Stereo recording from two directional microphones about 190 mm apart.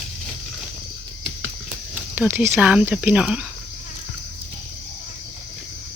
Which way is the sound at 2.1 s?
10° right (ahead or behind).